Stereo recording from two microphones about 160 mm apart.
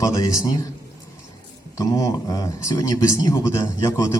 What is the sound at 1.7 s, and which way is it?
Speech, 20° left (ahead or behind).